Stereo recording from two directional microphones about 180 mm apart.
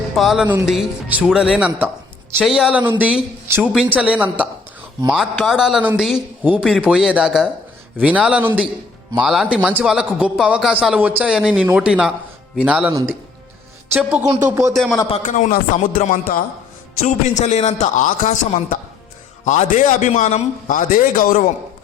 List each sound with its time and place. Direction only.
0.1 s a woman's voice: centre (ahead or behind)
12.9 s a woman's voice: 15° right (ahead or behind)
13.9 s speech: 5° right (ahead or behind)
14.3 s a woman's voice: 20° right (ahead or behind)
14.7 s speech: centre (ahead or behind)
15.1 s a man's voice: 40° left (ahead or behind)